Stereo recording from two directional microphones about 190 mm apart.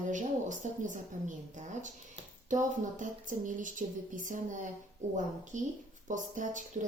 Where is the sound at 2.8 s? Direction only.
40° right (ahead or behind).